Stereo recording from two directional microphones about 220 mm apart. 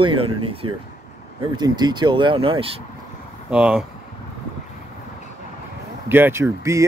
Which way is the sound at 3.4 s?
5° right (ahead or behind).